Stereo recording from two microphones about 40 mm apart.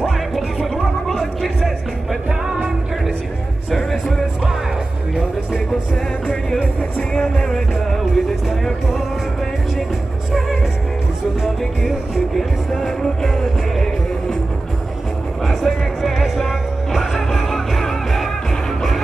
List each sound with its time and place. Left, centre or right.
0.0 s music: centre
1.0 s a sound: centre
2.2 s music: centre
7.2 s music: centre
13.0 s music: centre
15.4 s music: centre